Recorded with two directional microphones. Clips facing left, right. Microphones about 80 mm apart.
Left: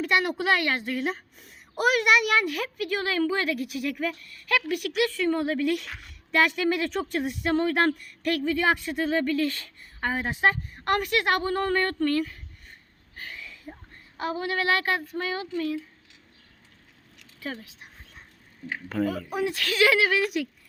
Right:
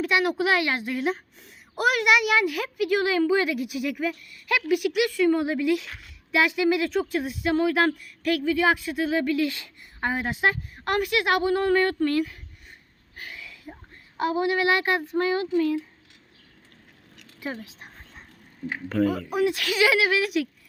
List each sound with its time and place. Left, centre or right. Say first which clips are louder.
0.0 s a woman's voice: right 2 dB; centre
13.1 s a sound: even; centre
14.2 s speech: right 5 dB; centre
17.4 s speech: right 2 dB; centre
17.7 s a sound: right 3 dB; right
18.9 s speech: right 4 dB; centre
19.3 s a woman's voice: right 4 dB; centre